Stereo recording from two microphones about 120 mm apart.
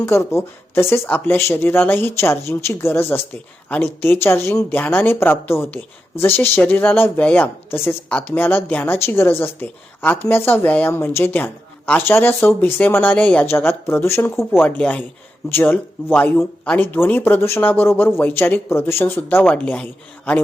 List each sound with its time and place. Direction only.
0.0 s speech: 20° left (ahead or behind)